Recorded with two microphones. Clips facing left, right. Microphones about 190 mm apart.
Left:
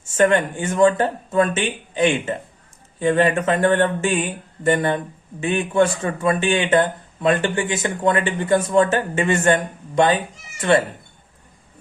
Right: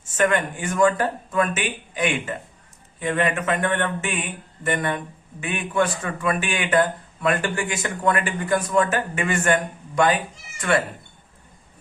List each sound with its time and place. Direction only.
0.1 s speech: 25° left (ahead or behind)